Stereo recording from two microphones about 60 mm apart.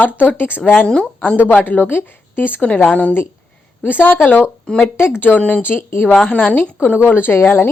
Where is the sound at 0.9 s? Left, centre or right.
Centre.